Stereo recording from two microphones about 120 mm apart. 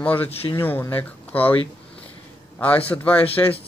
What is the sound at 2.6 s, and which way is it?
Speech, 15° left (ahead or behind).